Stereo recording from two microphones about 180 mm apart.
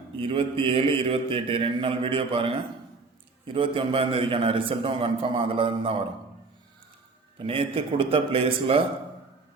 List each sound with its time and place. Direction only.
0.2 s a man's voice: 30° right (ahead or behind)
7.3 s a man's voice: 30° right (ahead or behind)